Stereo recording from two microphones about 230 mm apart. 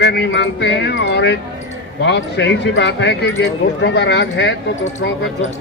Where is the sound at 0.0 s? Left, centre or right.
Left.